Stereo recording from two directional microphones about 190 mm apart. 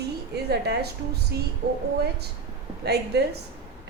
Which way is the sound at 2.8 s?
60° right (ahead or behind).